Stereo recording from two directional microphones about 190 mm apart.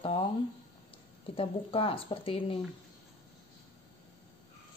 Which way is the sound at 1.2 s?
30° left (ahead or behind).